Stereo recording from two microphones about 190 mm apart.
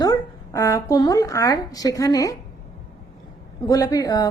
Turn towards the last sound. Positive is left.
turn(degrees=20)  # may be behind; listen again after turning